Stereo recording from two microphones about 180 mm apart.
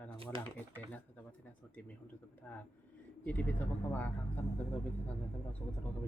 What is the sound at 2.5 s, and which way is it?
Speech, 10° left (ahead or behind).